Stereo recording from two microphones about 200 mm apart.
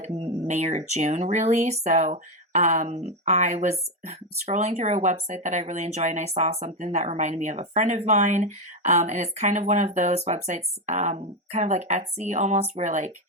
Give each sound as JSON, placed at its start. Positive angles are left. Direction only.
{"t": 0.4, "sound": "speech", "side_deg": -35}